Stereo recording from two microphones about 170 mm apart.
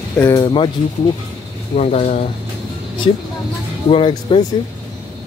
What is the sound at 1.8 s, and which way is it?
Speech, 40° left (ahead or behind).